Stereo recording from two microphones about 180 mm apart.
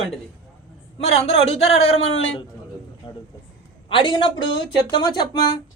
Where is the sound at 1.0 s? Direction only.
35° left (ahead or behind).